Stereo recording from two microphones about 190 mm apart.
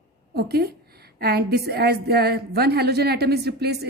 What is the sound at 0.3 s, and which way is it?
A woman's voice, 55° right (ahead or behind).